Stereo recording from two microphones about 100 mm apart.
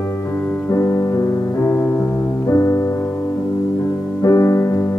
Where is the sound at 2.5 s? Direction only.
25° left (ahead or behind).